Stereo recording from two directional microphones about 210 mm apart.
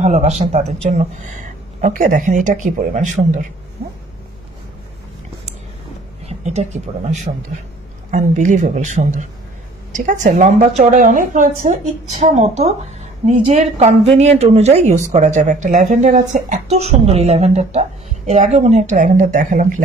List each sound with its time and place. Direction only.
0.0 s a woman's voice: 35° right (ahead or behind)
6.2 s a woman's voice: 30° right (ahead or behind)